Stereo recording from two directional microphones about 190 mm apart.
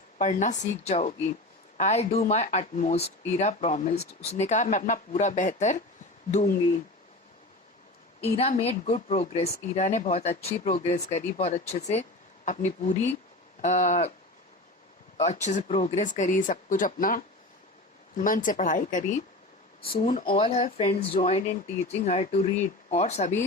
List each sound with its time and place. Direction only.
0.2 s speech: 40° left (ahead or behind)
8.2 s speech: 35° left (ahead or behind)
15.2 s speech: 35° left (ahead or behind)
20.2 s speech: 30° left (ahead or behind)